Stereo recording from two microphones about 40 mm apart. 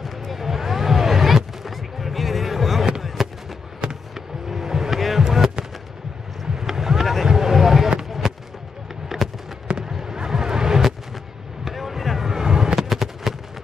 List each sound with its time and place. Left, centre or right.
0.0 s a sound: centre
3.0 s fireworks: centre
4.1 s vehicle: centre
6.5 s run: centre
7.2 s a sound: centre
8.2 s fireworks: centre
9.8 s a sound: centre
11.6 s fireworks: centre
12.8 s fireworks: centre